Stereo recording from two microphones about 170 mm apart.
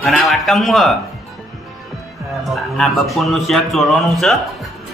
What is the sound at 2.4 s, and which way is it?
A man's voice, centre (ahead or behind).